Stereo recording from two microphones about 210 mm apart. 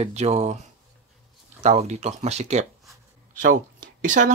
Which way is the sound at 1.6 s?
30° right (ahead or behind).